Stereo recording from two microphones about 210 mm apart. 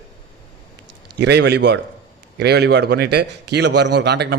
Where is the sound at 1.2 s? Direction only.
55° right (ahead or behind).